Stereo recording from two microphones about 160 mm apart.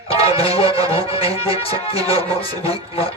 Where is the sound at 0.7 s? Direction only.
20° right (ahead or behind).